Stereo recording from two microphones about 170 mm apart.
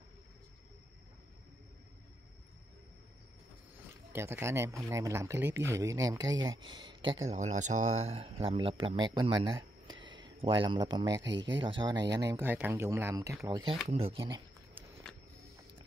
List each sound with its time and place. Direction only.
4.1 s speech: 15° right (ahead or behind)
7.3 s speech: 45° right (ahead or behind); by 11.1 s 25° right (ahead or behind)
11.2 s speech: 90° right
11.5 s speech: 30° right (ahead or behind)